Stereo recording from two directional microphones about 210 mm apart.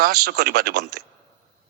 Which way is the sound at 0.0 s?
50° right (ahead or behind).